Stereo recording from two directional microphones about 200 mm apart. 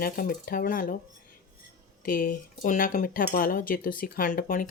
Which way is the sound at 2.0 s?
45° left (ahead or behind).